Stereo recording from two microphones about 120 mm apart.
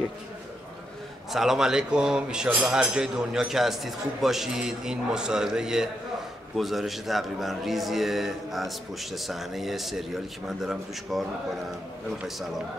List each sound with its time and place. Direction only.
1.3 s a man's voice: 5° right (ahead or behind)